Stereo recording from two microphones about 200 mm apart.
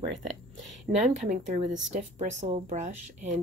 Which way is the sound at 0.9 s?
50° right (ahead or behind).